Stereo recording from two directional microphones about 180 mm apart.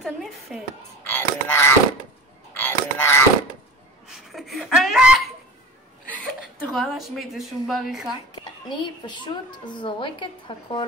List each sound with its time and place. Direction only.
0.0 s a woman's voice: centre (ahead or behind)
1.0 s speech: 15° left (ahead or behind)
2.5 s a sound: 10° left (ahead or behind)
4.3 s laughter: centre (ahead or behind)
6.0 s a woman's voice: 10° left (ahead or behind)
8.6 s a woman's voice: 25° left (ahead or behind)